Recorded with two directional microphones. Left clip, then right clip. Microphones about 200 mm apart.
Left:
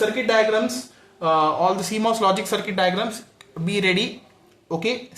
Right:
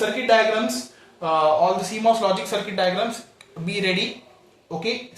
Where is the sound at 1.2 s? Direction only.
25° left (ahead or behind).